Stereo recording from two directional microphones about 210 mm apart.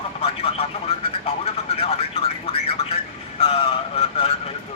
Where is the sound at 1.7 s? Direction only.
30° left (ahead or behind).